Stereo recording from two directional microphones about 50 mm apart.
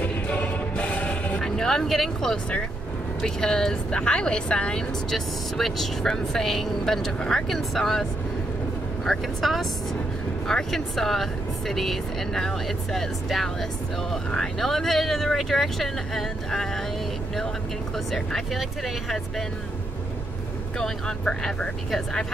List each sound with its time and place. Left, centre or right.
0.0 s music: left
1.4 s a woman's voice: centre
5.1 s speech: centre
18.1 s speech: centre
20.8 s a woman's voice: centre